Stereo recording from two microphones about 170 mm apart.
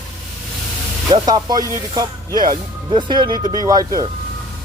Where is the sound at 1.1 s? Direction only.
25° right (ahead or behind).